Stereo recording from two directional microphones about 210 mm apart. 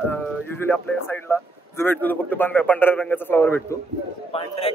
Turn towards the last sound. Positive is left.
turn(degrees=30)  # may be behind; listen again after turning